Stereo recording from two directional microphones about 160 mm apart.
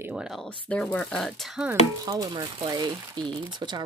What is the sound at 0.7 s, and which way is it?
Speech, 5° left (ahead or behind).